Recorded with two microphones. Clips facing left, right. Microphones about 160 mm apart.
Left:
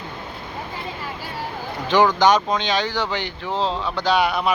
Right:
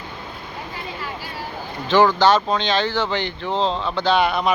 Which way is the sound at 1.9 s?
15° left (ahead or behind).